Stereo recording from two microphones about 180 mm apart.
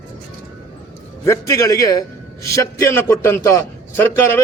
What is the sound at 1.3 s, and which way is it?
A man's voice, 20° left (ahead or behind).